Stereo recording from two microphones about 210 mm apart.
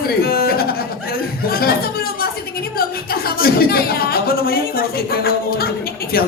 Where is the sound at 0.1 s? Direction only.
45° left (ahead or behind).